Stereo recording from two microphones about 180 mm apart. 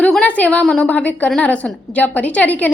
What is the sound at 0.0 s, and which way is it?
A woman's voice, 5° left (ahead or behind).